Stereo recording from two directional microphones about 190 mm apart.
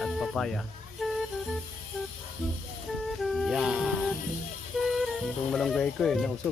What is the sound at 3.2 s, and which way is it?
Music, centre (ahead or behind).